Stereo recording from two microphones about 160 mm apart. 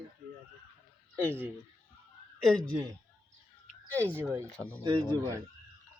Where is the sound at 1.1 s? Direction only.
15° right (ahead or behind).